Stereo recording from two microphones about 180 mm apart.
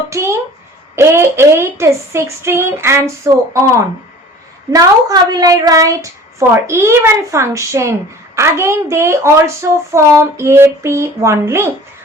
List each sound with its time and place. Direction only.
0.1 s a child's voice: 15° right (ahead or behind)